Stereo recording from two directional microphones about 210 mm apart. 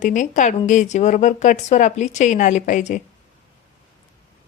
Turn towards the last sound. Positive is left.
turn(degrees=35)  # may be behind; listen again after turning